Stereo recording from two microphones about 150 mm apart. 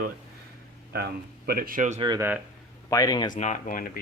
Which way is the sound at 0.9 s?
85° right.